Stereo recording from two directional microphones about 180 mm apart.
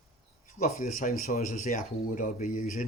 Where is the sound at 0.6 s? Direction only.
45° left (ahead or behind).